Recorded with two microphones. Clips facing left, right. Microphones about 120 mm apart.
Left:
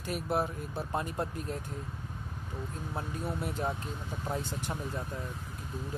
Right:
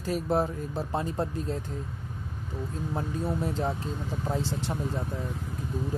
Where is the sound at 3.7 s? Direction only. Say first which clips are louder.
Right 5 dB; 30° right (ahead or behind).